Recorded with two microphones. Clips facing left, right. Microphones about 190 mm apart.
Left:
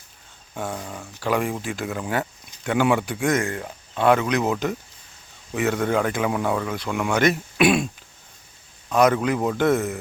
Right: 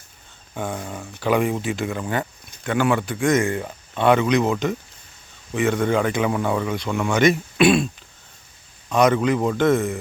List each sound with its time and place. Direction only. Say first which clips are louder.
0.5 s speech: right 2 dB; 5° right (ahead or behind)
8.9 s speech: right 1 dB; 5° left (ahead or behind)